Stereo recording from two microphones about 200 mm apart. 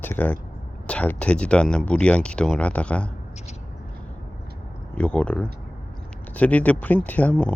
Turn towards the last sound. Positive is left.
turn(degrees=5)  # may be behind; listen again after turning